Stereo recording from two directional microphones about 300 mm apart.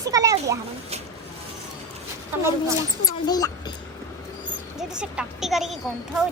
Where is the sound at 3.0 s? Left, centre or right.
Centre.